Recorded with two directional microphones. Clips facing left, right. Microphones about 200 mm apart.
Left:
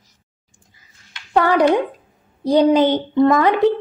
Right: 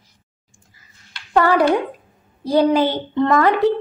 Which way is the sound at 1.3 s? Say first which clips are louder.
Left 1 dB; 15° left (ahead or behind).